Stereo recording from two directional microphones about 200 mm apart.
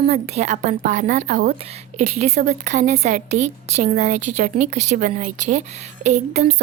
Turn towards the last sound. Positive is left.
turn(degrees=-35)  # may be behind; listen again after turning